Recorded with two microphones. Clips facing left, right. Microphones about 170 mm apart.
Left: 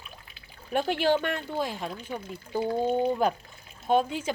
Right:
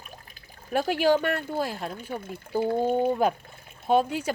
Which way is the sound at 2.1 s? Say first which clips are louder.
Right 1 dB; 50° right (ahead or behind).